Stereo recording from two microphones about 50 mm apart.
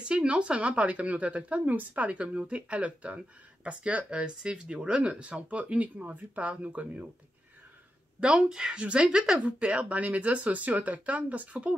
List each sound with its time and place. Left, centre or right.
0.0 s a woman's voice: right
8.2 s a woman's voice: centre